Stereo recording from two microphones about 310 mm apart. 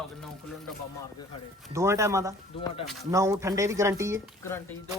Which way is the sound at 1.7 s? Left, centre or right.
Centre.